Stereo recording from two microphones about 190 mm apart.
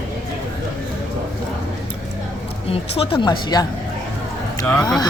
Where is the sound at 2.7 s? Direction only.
30° left (ahead or behind).